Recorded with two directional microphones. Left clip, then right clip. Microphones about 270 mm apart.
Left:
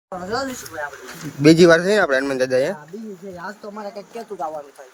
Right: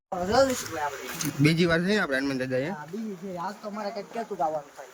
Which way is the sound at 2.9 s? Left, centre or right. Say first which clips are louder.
Left 2 dB; centre.